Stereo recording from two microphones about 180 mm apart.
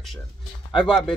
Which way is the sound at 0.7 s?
Centre (ahead or behind).